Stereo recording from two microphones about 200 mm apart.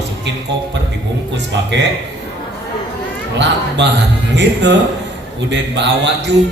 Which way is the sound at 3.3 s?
60° right (ahead or behind).